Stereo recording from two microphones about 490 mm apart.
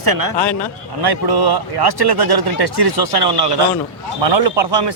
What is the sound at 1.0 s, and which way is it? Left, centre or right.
A man's voice, right.